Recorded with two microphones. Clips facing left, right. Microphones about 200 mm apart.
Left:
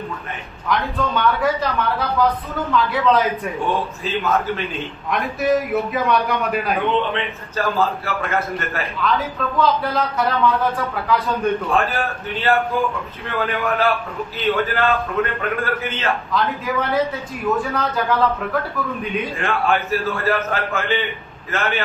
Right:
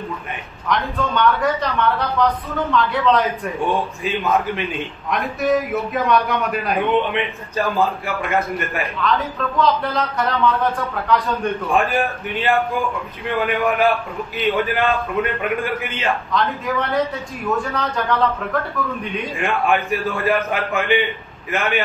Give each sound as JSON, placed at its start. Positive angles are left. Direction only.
{"t": 0.7, "sound": "a man's voice", "side_deg": 0}
{"t": 4.0, "sound": "a man's voice", "side_deg": -15}
{"t": 5.1, "sound": "a man's voice", "side_deg": 0}
{"t": 6.9, "sound": "a man's voice", "side_deg": -15}
{"t": 9.0, "sound": "a man's voice", "side_deg": 0}
{"t": 11.7, "sound": "a man's voice", "side_deg": -15}
{"t": 16.3, "sound": "a man's voice", "side_deg": 0}
{"t": 19.3, "sound": "a man's voice", "side_deg": -15}